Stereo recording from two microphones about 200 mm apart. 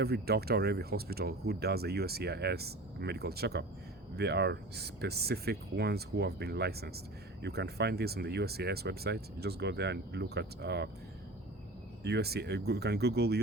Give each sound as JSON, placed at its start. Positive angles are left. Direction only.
{"t": 0.0, "sound": "speech", "side_deg": -50}
{"t": 12.0, "sound": "speech", "side_deg": -55}